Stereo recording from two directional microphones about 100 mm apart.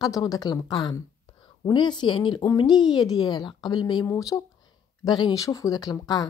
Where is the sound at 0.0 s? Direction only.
35° left (ahead or behind).